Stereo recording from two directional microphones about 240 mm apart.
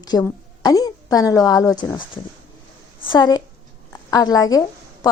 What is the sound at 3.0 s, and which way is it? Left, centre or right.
A woman's voice, centre.